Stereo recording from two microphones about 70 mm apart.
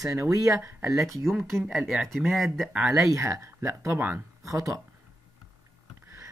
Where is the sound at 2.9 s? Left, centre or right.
Right.